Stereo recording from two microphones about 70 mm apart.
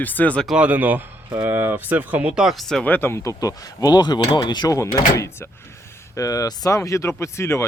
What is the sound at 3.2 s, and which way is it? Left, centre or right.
Speech, left.